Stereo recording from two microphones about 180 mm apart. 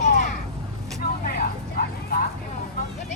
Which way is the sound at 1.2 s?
55° left (ahead or behind).